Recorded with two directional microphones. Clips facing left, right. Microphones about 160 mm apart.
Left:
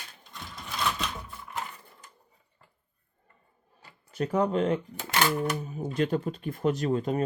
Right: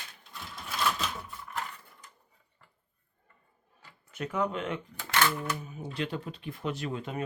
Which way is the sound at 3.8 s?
35° left (ahead or behind).